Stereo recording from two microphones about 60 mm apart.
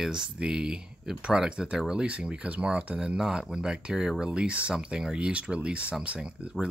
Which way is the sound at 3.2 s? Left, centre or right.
Centre.